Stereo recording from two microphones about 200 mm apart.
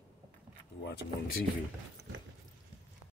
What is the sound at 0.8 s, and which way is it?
Speech, 55° left (ahead or behind).